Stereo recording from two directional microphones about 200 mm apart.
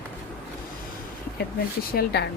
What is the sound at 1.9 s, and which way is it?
Speech, 55° left (ahead or behind).